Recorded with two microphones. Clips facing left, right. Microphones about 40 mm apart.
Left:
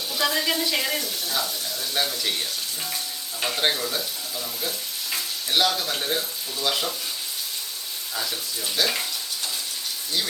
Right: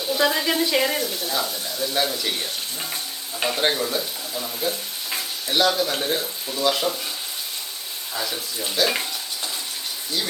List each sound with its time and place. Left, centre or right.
0.1 s speech: centre
3.6 s speech: centre
8.1 s speech: centre